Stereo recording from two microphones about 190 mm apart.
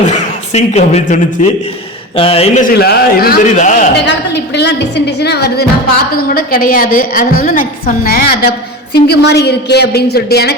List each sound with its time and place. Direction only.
0.1 s a man's voice: 35° left (ahead or behind)
2.1 s a man's voice: 30° left (ahead or behind)
2.7 s a woman's voice: 55° left (ahead or behind); by 3.8 s 40° left (ahead or behind)
4.0 s a woman's voice: 65° left (ahead or behind)